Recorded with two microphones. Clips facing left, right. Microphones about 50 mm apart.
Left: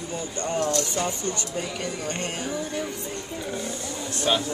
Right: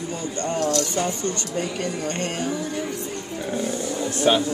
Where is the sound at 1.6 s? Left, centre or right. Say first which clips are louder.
Right 7 dB; centre.